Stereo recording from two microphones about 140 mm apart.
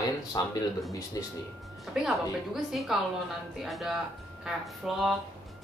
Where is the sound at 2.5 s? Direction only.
Centre (ahead or behind).